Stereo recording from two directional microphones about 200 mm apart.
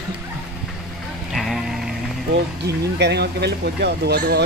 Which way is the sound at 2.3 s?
60° right (ahead or behind).